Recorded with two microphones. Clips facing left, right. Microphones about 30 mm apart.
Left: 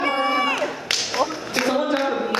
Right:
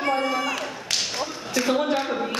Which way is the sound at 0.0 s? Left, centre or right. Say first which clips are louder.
Left 3 dB; left.